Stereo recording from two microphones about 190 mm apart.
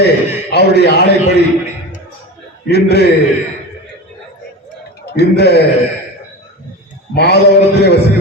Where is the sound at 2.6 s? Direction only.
60° left (ahead or behind).